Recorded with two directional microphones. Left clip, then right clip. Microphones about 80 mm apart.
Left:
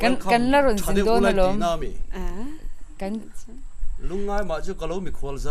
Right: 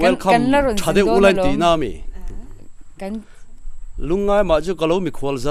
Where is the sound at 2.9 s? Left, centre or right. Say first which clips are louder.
Right 2 dB; centre.